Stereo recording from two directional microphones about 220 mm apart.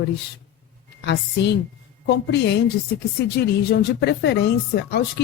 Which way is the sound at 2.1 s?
50° left (ahead or behind).